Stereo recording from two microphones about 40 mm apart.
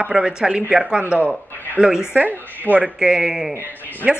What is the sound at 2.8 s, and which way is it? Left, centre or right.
Speech, centre.